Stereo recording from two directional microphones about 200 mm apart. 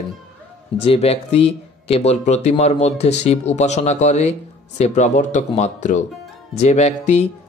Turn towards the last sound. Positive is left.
turn(degrees=35)  # may be behind; listen again after turning